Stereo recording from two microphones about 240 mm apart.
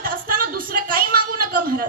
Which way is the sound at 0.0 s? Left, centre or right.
Right.